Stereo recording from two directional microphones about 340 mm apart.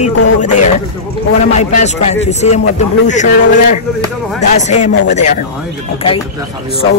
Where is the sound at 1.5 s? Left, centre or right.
Centre.